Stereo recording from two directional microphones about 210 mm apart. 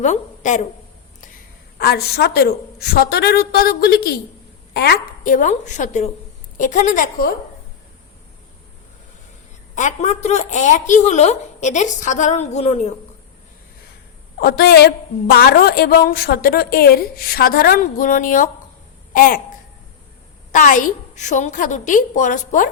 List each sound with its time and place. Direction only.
0.0 s a woman's voice: 35° left (ahead or behind)
1.8 s a woman's voice: 50° left (ahead or behind)
9.7 s a woman's voice: 35° left (ahead or behind)
14.4 s a woman's voice: 45° left (ahead or behind)
19.1 s a sound: 40° left (ahead or behind)
20.5 s a woman's voice: 40° left (ahead or behind)